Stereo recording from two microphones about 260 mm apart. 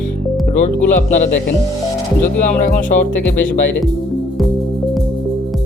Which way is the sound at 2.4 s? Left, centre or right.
Left.